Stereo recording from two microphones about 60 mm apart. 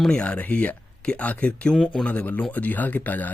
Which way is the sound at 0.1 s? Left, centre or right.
Centre.